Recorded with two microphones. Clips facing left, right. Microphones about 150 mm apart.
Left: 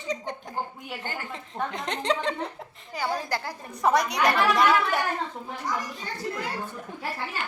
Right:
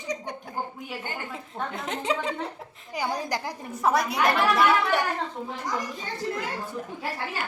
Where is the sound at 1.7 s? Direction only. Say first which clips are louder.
Left 1 dB; 5° right (ahead or behind).